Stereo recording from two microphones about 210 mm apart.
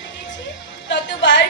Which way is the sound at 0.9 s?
60° left (ahead or behind).